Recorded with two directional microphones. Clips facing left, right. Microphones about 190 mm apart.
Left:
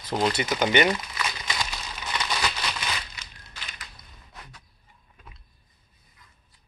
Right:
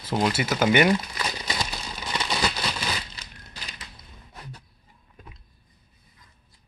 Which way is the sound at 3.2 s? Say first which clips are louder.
Right 2 dB; 35° right (ahead or behind).